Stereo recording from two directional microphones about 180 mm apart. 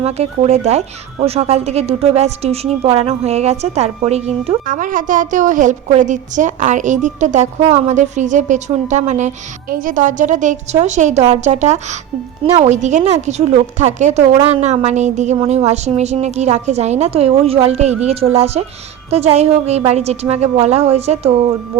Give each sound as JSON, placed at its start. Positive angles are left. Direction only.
{"t": 0.0, "sound": "a woman's voice", "side_deg": -35}
{"t": 4.6, "sound": "a woman's voice", "side_deg": -50}